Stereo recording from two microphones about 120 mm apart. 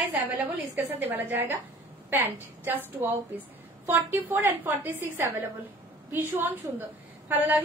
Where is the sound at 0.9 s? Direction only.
15° right (ahead or behind).